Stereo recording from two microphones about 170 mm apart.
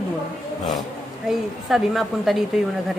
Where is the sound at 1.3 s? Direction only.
Centre (ahead or behind).